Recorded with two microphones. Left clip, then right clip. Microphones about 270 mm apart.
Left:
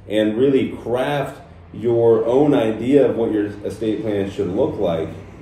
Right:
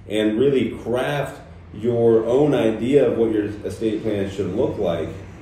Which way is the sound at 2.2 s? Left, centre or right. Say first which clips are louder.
Left 2 dB; centre.